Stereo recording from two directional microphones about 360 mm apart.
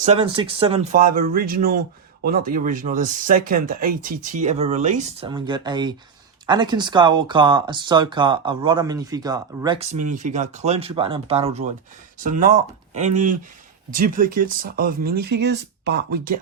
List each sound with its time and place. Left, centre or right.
0.0 s speech: centre
12.9 s speech: centre